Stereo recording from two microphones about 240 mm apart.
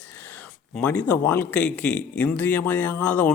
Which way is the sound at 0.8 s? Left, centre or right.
Centre.